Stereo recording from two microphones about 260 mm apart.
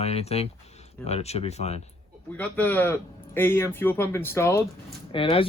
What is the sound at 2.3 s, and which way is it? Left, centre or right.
A man's voice, centre.